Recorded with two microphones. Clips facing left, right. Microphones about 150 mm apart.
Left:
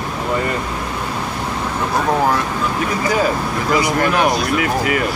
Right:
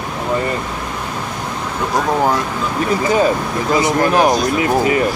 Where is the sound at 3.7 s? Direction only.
25° right (ahead or behind).